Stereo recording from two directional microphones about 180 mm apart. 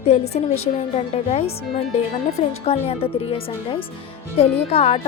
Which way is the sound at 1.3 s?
35° left (ahead or behind).